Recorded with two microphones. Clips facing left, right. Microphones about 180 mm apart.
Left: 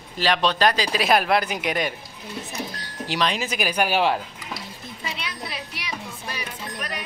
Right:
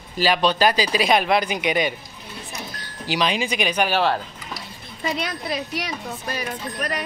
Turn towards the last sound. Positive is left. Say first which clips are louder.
# right 5 dB
turn(degrees=-40)  # may be behind; listen again after turning